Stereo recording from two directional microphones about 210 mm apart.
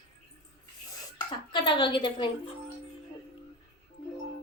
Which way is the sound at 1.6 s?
25° left (ahead or behind).